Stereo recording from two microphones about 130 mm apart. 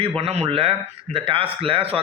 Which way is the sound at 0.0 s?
50° right (ahead or behind).